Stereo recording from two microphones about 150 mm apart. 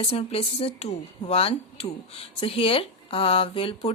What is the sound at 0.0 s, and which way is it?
A woman's voice, 40° left (ahead or behind).